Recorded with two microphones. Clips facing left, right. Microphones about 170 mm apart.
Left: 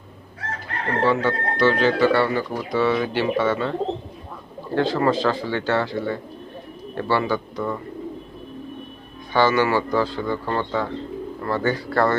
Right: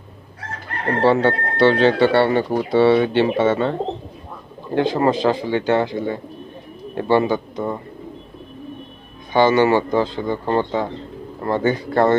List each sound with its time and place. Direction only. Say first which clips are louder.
1.0 s a man's voice: right 5 dB; 30° right (ahead or behind)
4.7 s a man's voice: right 2 dB; 15° right (ahead or behind)
9.3 s a man's voice: right 4 dB; 20° right (ahead or behind)